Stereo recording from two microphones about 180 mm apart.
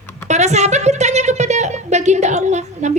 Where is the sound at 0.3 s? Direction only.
40° right (ahead or behind).